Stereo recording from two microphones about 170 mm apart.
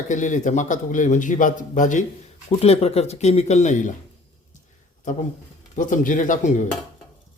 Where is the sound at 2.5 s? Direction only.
35° left (ahead or behind).